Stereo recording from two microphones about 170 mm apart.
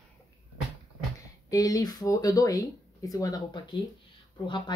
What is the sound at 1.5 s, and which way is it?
Speech, 20° left (ahead or behind).